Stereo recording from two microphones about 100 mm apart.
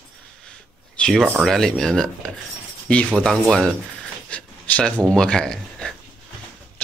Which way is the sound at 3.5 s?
5° left (ahead or behind).